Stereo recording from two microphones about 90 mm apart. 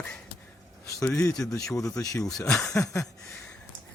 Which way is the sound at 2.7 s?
35° left (ahead or behind).